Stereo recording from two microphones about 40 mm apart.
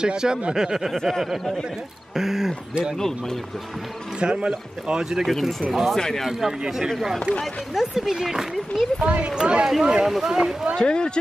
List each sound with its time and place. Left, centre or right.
0.0 s a man's voice: centre
2.1 s speech: centre
4.2 s a man's voice: right
4.9 s speech: centre
5.9 s speech: centre
6.9 s speech: centre
9.0 s a man's voice: right
9.7 s speech: centre
10.8 s speech: left